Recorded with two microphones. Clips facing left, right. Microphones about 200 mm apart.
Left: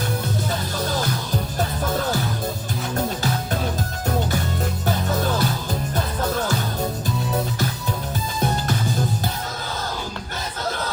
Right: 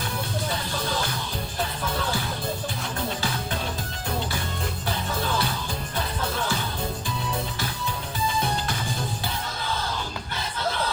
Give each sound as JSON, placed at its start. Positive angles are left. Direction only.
{"t": 1.5, "sound": "music", "side_deg": 40}
{"t": 4.9, "sound": "music", "side_deg": 40}